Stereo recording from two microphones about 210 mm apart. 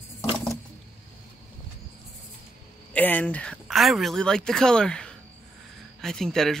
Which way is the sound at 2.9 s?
5° left (ahead or behind).